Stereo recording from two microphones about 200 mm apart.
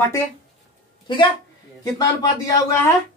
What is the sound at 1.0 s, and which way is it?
Speech, 25° left (ahead or behind).